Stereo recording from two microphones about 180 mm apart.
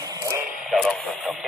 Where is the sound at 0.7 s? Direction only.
Centre (ahead or behind).